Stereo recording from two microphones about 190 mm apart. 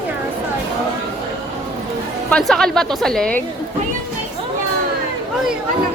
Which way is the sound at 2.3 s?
Centre (ahead or behind).